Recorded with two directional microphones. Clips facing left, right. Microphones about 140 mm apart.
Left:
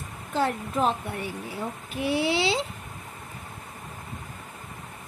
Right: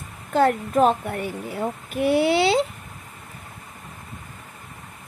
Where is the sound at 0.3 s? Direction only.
55° right (ahead or behind).